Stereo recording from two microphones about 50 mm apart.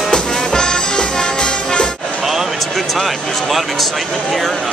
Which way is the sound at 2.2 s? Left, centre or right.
Centre.